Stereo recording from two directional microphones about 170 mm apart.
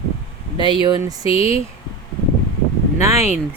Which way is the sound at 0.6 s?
25° right (ahead or behind).